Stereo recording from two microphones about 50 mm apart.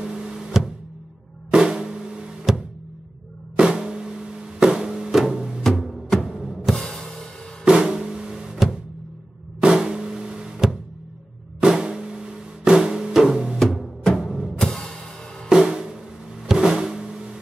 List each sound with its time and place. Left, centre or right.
0.0 s a sound: centre
1.5 s drum: centre
4.6 s music: centre
6.7 s music: centre
7.6 s drum: centre
14.1 s music: centre
14.6 s music: centre
15.4 s drum: centre
16.4 s a sound: centre